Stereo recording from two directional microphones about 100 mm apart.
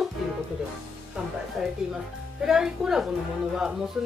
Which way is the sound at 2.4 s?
5° right (ahead or behind).